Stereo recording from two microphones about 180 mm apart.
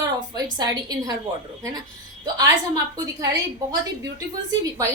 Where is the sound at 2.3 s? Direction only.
20° right (ahead or behind).